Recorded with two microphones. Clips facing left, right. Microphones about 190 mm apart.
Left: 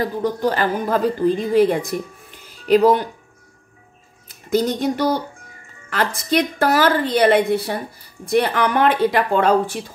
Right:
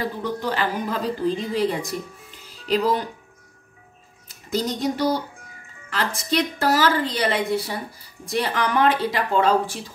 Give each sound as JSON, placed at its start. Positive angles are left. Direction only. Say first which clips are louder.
{"t": 0.0, "sound": "a woman's voice", "louder": "left 6 dB", "side_deg": 45}
{"t": 4.5, "sound": "a woman's voice", "louder": "left 5 dB", "side_deg": 60}